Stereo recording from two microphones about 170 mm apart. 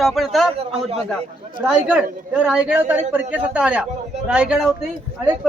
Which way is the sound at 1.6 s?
5° right (ahead or behind).